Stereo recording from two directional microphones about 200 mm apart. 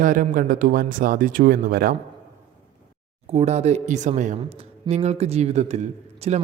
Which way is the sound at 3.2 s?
30° right (ahead or behind).